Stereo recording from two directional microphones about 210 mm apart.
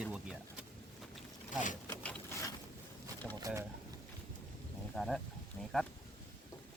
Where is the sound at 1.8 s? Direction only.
5° left (ahead or behind).